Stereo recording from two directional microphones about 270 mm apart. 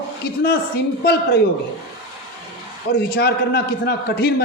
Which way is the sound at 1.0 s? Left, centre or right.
Left.